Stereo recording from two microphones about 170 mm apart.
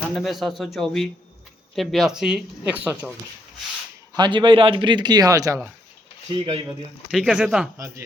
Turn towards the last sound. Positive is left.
turn(degrees=-5)  # may be behind; listen again after turning